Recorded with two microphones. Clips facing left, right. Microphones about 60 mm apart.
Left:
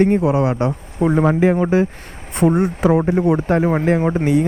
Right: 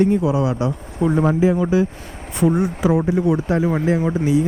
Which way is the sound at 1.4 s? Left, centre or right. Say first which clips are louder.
Left 2 dB; left.